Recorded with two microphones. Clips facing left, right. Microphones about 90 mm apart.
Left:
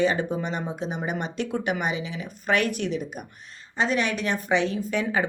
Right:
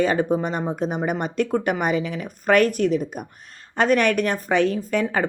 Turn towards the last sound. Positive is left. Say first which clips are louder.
# right 3 dB
turn(degrees=-45)  # may be behind; listen again after turning